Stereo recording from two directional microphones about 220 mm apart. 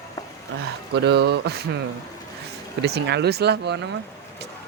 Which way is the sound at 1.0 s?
50° right (ahead or behind).